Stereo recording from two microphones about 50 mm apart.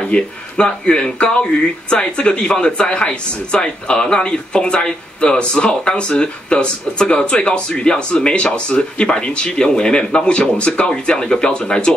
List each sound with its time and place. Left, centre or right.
0.1 s speech: centre